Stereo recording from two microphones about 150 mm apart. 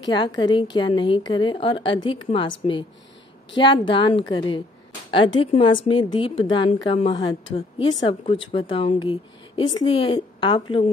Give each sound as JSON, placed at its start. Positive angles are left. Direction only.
{"t": 0.0, "sound": "a woman's voice", "side_deg": 30}